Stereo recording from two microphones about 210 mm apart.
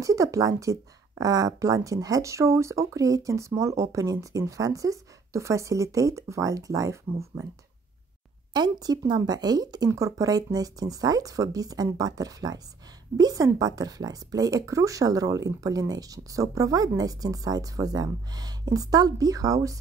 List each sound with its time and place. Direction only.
0.0 s speech: 15° right (ahead or behind)
8.5 s speech: 20° right (ahead or behind)